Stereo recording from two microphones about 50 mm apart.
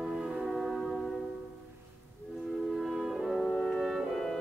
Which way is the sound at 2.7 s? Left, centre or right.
Centre.